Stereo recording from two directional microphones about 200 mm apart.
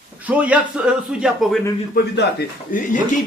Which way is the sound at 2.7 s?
45° left (ahead or behind).